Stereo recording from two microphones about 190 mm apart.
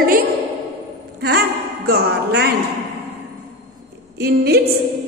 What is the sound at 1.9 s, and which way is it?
Speech, 55° right (ahead or behind).